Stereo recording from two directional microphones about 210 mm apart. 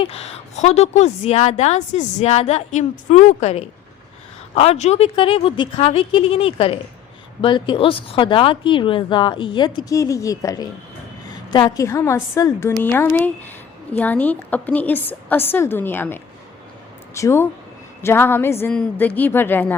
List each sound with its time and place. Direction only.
0.0 s a woman's voice: 30° left (ahead or behind); by 19.7 s 10° left (ahead or behind)